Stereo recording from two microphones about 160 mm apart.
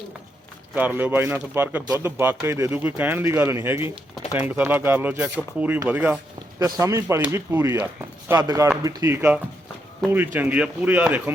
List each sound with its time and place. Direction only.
0.8 s speech: 10° right (ahead or behind)
6.6 s speech: 25° right (ahead or behind)
10.0 s speech: centre (ahead or behind)
10.3 s speech: 10° right (ahead or behind)